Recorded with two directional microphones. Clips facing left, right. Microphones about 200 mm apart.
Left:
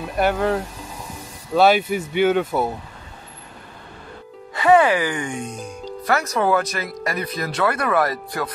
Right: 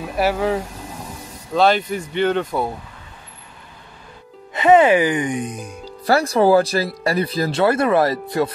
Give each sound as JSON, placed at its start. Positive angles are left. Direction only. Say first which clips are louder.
{"t": 0.2, "sound": "speech", "louder": "even", "side_deg": -5}
{"t": 1.5, "sound": "speech", "louder": "left 1 dB", "side_deg": 5}
{"t": 4.6, "sound": "speech", "louder": "right 3 dB", "side_deg": -20}
{"t": 6.0, "sound": "speech", "louder": "right 5 dB", "side_deg": -30}